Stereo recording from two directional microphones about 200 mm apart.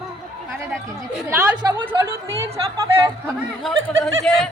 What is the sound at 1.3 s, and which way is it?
Chatter, 20° right (ahead or behind).